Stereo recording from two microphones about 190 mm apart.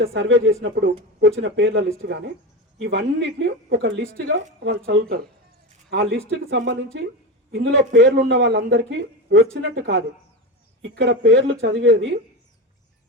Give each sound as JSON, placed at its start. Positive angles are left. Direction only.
{"t": 0.0, "sound": "speech", "side_deg": -60}